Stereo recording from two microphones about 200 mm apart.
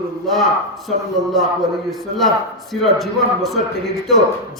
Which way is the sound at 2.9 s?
Centre (ahead or behind).